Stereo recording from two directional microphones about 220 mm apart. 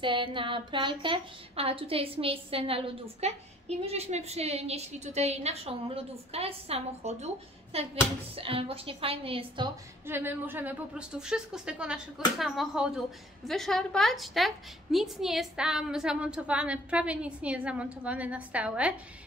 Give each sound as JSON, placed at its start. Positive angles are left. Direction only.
{"t": 0.0, "sound": "a woman's voice", "side_deg": -20}
{"t": 10.0, "sound": "a woman's voice", "side_deg": -10}